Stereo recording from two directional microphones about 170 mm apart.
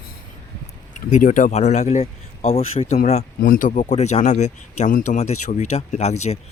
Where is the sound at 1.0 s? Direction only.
50° left (ahead or behind).